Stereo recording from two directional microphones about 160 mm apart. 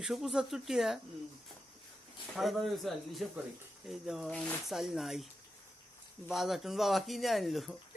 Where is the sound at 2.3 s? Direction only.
Centre (ahead or behind).